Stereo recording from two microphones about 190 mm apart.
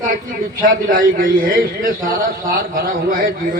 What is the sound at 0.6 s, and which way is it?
A man's voice, 45° right (ahead or behind).